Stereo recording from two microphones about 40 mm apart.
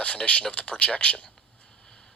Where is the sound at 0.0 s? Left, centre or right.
Left.